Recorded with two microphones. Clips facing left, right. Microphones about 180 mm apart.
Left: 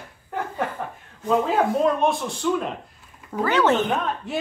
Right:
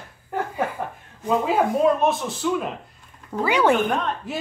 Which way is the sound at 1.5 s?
5° right (ahead or behind).